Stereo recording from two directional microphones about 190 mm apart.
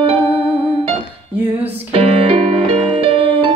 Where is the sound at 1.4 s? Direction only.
10° right (ahead or behind).